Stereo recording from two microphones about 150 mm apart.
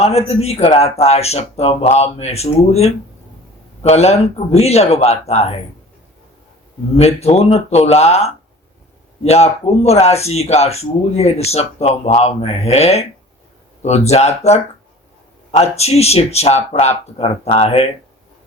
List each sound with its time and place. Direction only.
0.0 s speech: 45° left (ahead or behind)
6.9 s speech: 45° left (ahead or behind)